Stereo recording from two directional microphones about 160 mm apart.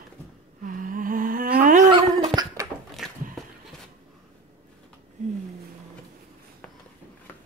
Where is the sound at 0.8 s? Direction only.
60° right (ahead or behind).